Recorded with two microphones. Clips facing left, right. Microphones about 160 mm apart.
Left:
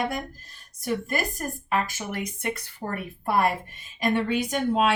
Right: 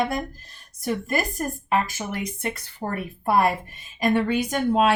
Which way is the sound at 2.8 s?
45° right (ahead or behind).